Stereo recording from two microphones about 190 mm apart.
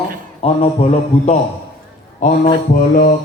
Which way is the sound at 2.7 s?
50° left (ahead or behind).